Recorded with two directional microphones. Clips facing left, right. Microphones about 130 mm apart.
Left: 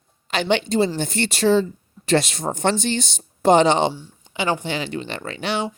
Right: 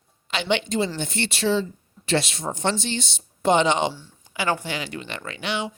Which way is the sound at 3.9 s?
20° left (ahead or behind).